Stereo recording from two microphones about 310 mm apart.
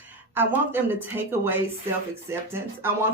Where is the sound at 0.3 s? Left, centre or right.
Centre.